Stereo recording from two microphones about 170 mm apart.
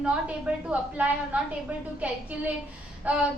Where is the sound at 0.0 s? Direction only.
5° right (ahead or behind).